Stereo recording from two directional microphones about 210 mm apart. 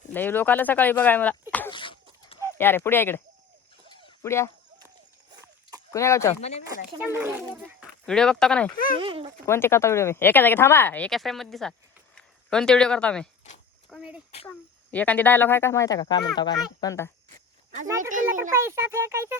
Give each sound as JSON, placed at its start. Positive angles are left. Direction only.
{"t": 0.1, "sound": "speech", "side_deg": 10}
{"t": 1.7, "sound": "a sound", "side_deg": 25}
{"t": 2.6, "sound": "speech", "side_deg": 10}
{"t": 3.8, "sound": "a sound", "side_deg": 15}
{"t": 5.9, "sound": "speech", "side_deg": 15}
{"t": 6.4, "sound": "speech", "side_deg": 30}
{"t": 7.0, "sound": "speech", "side_deg": -10}
{"t": 9.0, "sound": "speech", "side_deg": -25}
{"t": 9.5, "sound": "speech", "side_deg": 10}
{"t": 14.4, "sound": "speech", "side_deg": 5}
{"t": 17.8, "sound": "a child's voice", "side_deg": -15}